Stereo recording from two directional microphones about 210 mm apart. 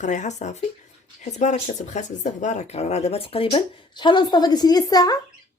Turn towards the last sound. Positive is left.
turn(degrees=20)  # may be behind; listen again after turning